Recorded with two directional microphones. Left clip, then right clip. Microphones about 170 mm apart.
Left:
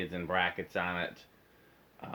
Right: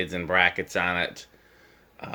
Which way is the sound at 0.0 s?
40° right (ahead or behind).